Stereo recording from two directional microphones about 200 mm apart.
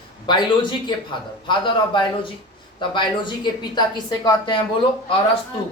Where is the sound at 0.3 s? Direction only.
25° left (ahead or behind).